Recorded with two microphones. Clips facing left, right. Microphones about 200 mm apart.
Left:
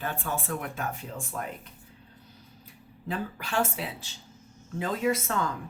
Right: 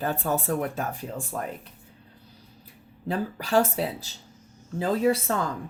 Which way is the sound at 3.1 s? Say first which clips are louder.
Right 7 dB; 40° right (ahead or behind).